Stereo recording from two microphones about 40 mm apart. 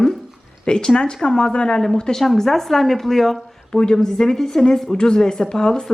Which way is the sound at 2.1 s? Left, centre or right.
Centre.